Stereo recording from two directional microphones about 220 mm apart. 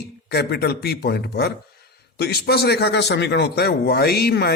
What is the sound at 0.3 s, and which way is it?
Speech, 50° left (ahead or behind).